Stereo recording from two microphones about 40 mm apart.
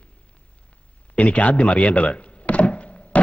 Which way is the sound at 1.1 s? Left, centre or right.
Left.